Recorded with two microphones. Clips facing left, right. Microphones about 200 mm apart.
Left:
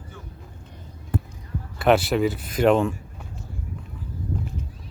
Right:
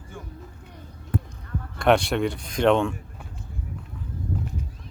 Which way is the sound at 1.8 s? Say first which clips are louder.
Left 1 dB; 5° left (ahead or behind).